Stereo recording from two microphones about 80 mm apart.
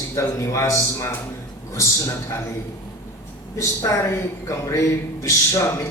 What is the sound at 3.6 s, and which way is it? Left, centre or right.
A man's voice, left.